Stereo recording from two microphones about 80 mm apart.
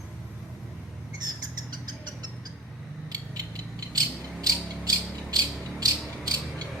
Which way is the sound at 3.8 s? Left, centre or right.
Right.